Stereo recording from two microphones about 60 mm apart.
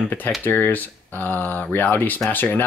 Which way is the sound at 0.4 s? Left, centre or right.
Left.